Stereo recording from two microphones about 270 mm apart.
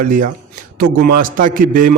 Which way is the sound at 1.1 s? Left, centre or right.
Right.